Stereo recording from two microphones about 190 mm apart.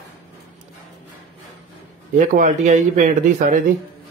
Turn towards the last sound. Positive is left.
turn(degrees=-45)  # may be behind; listen again after turning